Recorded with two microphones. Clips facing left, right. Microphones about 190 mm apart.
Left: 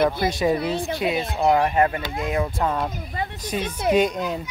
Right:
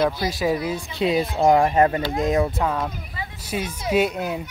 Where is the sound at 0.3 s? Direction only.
Centre (ahead or behind).